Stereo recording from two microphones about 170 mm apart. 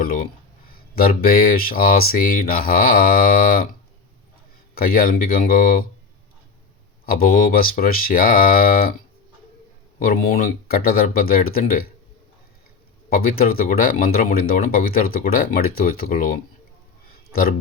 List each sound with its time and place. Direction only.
0.0 s speech: 55° left (ahead or behind)
4.7 s speech: 60° left (ahead or behind)
7.0 s speech: 60° left (ahead or behind)
10.0 s speech: 60° left (ahead or behind)
13.1 s speech: 60° left (ahead or behind)